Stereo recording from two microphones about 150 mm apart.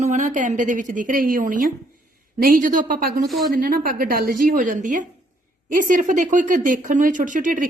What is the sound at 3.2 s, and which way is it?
Speech, centre (ahead or behind).